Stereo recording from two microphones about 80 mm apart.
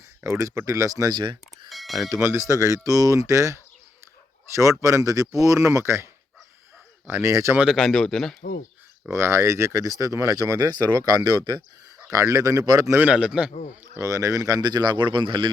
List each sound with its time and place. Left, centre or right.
0.2 s speech: right
1.1 s speech: right
1.7 s a sound: centre
2.1 s speech: right
7.1 s speech: right
7.6 s speech: centre
9.1 s speech: right
12.1 s speech: right
13.0 s a man's voice: centre
13.9 s a man's voice: right